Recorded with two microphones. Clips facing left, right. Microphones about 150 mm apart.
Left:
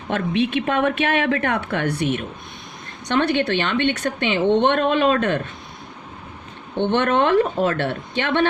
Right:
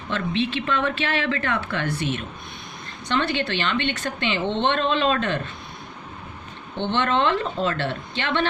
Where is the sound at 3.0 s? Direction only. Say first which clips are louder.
Left 5 dB; 60° left (ahead or behind).